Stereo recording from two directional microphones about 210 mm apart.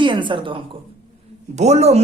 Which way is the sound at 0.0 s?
25° right (ahead or behind).